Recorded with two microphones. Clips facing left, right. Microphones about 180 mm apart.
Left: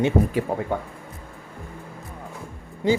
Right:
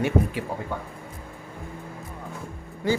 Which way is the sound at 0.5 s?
50° left (ahead or behind).